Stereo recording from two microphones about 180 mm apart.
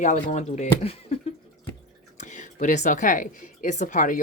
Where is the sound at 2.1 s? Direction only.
45° left (ahead or behind).